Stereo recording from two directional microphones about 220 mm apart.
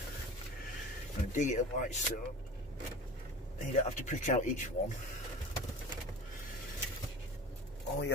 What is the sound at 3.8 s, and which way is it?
Speech, 35° left (ahead or behind).